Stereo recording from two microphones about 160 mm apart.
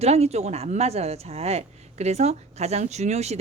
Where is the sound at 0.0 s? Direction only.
40° right (ahead or behind).